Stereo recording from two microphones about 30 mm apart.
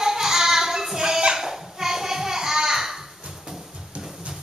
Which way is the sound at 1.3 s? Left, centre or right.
Centre.